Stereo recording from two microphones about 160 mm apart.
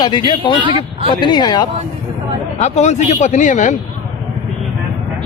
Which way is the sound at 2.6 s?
45° left (ahead or behind).